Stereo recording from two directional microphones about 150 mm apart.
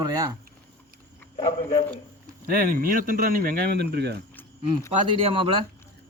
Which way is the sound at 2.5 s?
70° right (ahead or behind).